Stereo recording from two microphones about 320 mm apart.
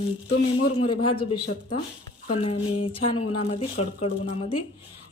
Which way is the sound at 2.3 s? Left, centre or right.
Centre.